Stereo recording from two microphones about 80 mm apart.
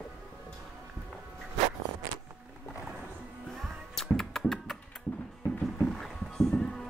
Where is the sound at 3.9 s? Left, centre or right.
Centre.